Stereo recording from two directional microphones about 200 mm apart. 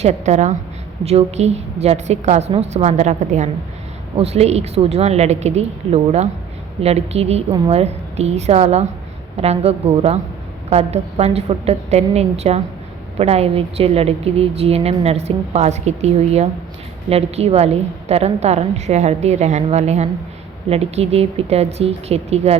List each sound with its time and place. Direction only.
0.0 s a woman's voice: 35° right (ahead or behind)